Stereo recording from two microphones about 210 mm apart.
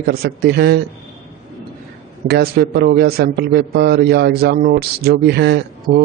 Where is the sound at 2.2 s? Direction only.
50° right (ahead or behind).